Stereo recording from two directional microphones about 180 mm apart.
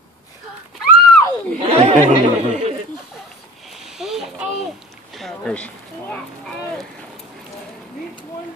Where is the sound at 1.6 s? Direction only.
30° right (ahead or behind).